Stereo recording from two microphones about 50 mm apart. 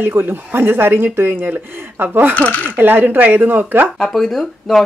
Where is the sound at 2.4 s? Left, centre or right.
Left.